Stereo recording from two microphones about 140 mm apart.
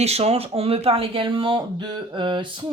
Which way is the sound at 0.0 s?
50° right (ahead or behind).